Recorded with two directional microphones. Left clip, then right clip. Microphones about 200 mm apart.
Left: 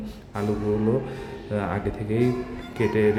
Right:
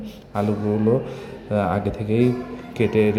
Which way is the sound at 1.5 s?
15° right (ahead or behind).